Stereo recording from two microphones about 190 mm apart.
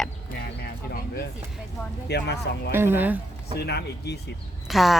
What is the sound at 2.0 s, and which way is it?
Speech, 60° left (ahead or behind).